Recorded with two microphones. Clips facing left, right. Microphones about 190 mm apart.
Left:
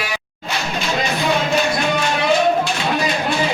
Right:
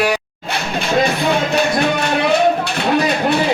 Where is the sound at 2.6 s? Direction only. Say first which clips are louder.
Right 3 dB; 60° right (ahead or behind).